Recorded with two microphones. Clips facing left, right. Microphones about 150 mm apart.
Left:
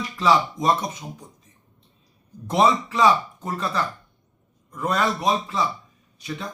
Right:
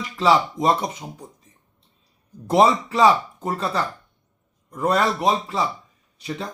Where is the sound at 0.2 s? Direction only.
30° right (ahead or behind).